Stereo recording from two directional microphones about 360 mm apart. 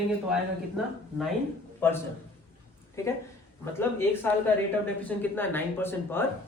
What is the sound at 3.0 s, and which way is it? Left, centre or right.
A man's voice, centre.